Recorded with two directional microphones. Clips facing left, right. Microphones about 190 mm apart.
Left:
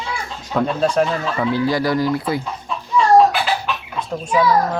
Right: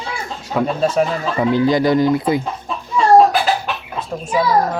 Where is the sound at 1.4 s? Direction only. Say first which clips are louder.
Right 5 dB; 20° right (ahead or behind).